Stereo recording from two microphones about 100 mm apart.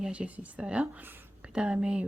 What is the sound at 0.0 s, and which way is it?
A woman's voice, 10° right (ahead or behind).